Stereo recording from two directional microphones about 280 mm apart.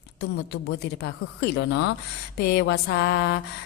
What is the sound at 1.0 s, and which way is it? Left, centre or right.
Speech, left.